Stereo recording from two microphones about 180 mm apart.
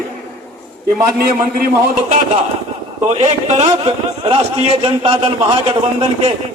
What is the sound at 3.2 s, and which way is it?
A man's voice, 35° right (ahead or behind).